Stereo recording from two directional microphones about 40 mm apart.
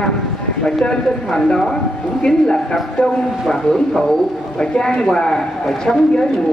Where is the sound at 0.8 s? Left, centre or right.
Centre.